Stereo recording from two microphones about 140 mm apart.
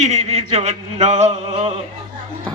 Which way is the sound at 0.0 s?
50° right (ahead or behind).